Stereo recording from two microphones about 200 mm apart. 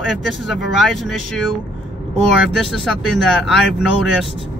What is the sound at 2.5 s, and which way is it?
Speech, centre (ahead or behind).